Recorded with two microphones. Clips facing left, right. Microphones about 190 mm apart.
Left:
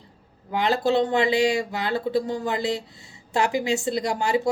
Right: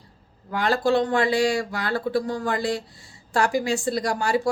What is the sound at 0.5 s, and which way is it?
Speech, 20° left (ahead or behind).